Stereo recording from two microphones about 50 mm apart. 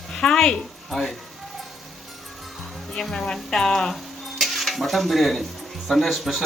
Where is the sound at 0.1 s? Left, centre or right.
Centre.